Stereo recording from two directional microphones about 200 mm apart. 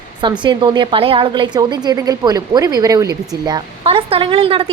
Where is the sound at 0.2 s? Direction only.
25° right (ahead or behind).